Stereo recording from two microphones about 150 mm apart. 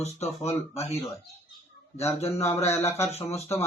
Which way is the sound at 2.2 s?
45° left (ahead or behind).